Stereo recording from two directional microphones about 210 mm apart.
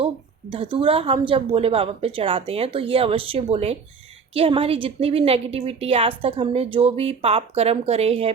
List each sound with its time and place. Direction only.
0.5 s a woman's voice: 25° right (ahead or behind)